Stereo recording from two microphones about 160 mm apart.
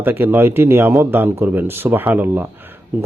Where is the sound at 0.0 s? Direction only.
15° right (ahead or behind).